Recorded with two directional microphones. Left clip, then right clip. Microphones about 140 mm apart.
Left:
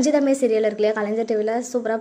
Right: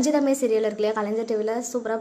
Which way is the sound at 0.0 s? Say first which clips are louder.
Left 3 dB; 15° left (ahead or behind).